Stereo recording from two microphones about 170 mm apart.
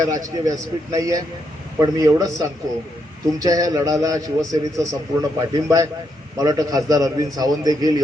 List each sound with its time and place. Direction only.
0.0 s a man's voice: 20° right (ahead or behind)